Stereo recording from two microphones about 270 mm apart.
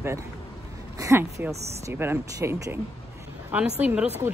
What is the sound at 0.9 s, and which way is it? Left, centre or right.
A woman's voice, centre.